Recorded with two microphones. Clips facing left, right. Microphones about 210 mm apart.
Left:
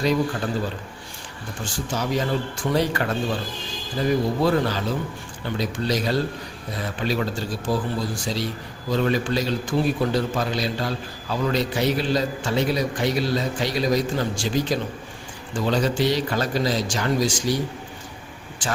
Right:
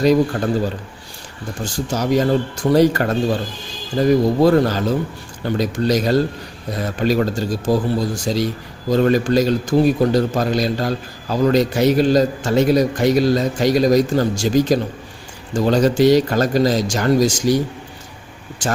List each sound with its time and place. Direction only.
1.6 s a man's voice: 40° right (ahead or behind)
18.6 s speech: 45° right (ahead or behind)